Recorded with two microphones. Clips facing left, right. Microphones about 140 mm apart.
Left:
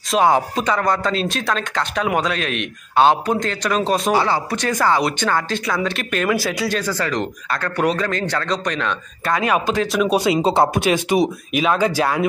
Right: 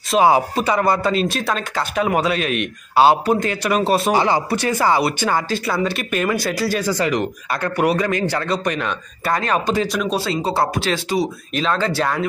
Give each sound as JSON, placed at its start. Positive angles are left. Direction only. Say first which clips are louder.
{"t": 0.1, "sound": "speech", "louder": "right 1 dB", "side_deg": -5}
{"t": 4.1, "sound": "speech", "louder": "right 1 dB", "side_deg": -15}
{"t": 6.8, "sound": "speech", "louder": "right 3 dB", "side_deg": -15}
{"t": 9.4, "sound": "speech", "louder": "left 2 dB", "side_deg": 10}
{"t": 10.4, "sound": "speech", "louder": "left 4 dB", "side_deg": 20}